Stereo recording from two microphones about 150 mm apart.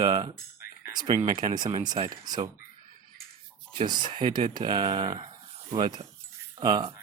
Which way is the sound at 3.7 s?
30° right (ahead or behind).